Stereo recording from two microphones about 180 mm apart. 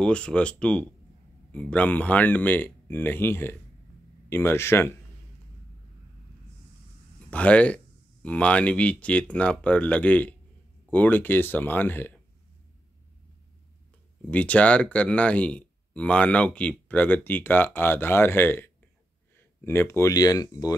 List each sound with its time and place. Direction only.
0.0 s speech: 5° left (ahead or behind)
7.2 s speech: 5° left (ahead or behind)
14.3 s speech: 5° left (ahead or behind)